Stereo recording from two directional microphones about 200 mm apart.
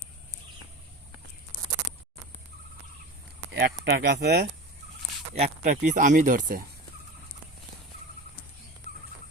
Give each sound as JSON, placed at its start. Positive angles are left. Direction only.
{"t": 3.5, "sound": "speech", "side_deg": -55}
{"t": 5.3, "sound": "speech", "side_deg": -35}